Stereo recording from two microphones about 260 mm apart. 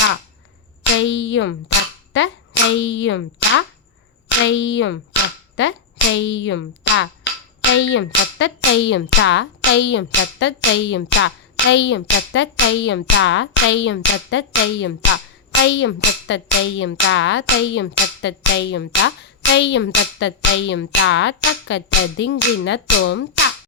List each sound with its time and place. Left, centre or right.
0.9 s a child's voice: left